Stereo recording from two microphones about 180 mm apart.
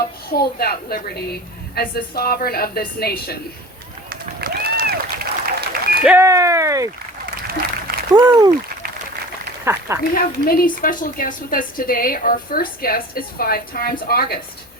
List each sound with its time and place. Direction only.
0.3 s a woman's voice: 60° left (ahead or behind)
4.1 s applause: 55° right (ahead or behind)
6.1 s speech: 15° right (ahead or behind)
8.1 s speech: 20° right (ahead or behind)
9.7 s speech: 15° right (ahead or behind)
10.0 s a woman's voice: 55° left (ahead or behind)